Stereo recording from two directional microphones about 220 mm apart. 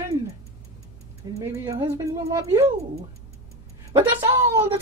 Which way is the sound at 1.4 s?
15° right (ahead or behind).